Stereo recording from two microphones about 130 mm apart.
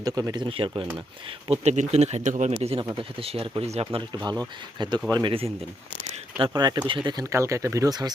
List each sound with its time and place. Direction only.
0.0 s speech: 30° right (ahead or behind)
0.4 s speech: 45° right (ahead or behind)
1.5 s speech: 60° right (ahead or behind)
4.8 s speech: 35° right (ahead or behind)
7.3 s speech: 20° right (ahead or behind)